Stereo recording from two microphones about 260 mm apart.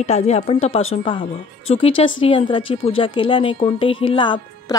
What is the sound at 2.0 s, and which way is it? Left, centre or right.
Speech, centre.